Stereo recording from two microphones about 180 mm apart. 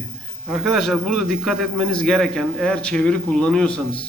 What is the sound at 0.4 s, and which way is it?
A man's voice, centre (ahead or behind).